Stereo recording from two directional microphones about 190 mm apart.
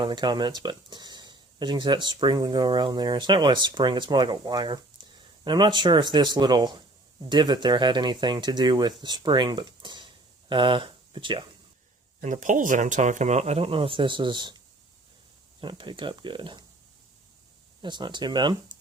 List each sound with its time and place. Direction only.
0.0 s speech: 25° right (ahead or behind)
12.2 s speech: 40° right (ahead or behind); by 14.6 s 25° right (ahead or behind)
15.6 s speech: 25° right (ahead or behind)
17.8 s speech: 25° right (ahead or behind)